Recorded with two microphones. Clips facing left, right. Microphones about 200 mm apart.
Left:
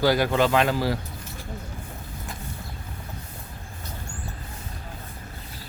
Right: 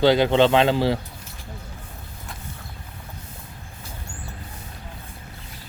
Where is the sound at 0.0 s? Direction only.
25° right (ahead or behind).